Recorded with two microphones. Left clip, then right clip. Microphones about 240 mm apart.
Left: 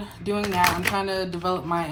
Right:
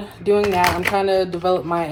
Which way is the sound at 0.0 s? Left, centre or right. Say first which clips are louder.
Right 10 dB; centre.